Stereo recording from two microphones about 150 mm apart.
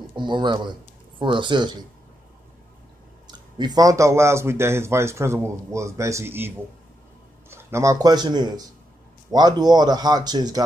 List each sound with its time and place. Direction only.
0.1 s speech: 30° right (ahead or behind)
3.3 s speech: 30° right (ahead or behind)